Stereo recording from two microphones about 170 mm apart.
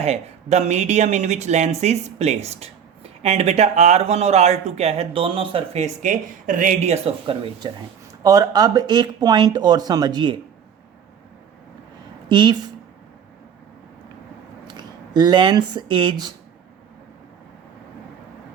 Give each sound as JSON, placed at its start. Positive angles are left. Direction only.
{"t": 0.0, "sound": "speech", "side_deg": -40}
{"t": 8.2, "sound": "speech", "side_deg": -20}
{"t": 12.3, "sound": "speech", "side_deg": -25}
{"t": 14.7, "sound": "speech", "side_deg": -25}